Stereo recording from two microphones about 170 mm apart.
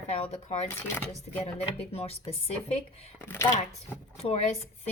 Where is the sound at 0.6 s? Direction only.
15° left (ahead or behind).